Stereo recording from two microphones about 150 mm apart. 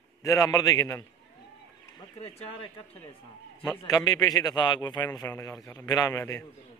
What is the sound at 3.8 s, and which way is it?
A man's voice, 25° left (ahead or behind).